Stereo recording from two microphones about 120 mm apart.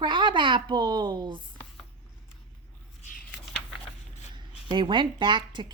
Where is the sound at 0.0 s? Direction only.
40° right (ahead or behind).